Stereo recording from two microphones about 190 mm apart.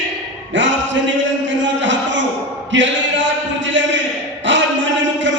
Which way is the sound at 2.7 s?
75° right (ahead or behind).